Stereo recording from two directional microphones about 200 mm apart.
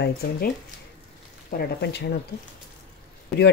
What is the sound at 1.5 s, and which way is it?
Speech, 55° left (ahead or behind).